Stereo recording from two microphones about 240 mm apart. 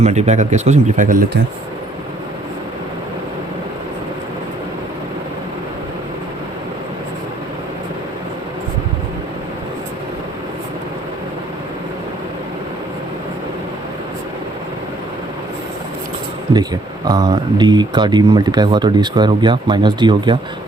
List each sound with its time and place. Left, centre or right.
0.0 s speech: right
17.1 s speech: centre